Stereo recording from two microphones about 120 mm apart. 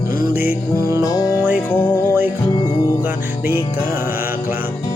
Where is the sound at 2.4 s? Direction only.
40° left (ahead or behind).